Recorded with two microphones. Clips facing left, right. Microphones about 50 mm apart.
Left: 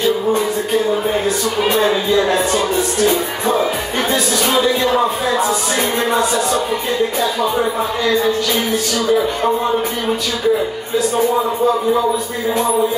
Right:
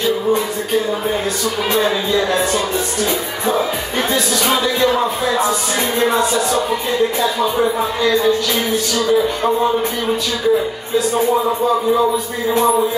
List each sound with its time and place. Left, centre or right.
1.6 s music: centre
4.6 s music: centre
8.9 s music: centre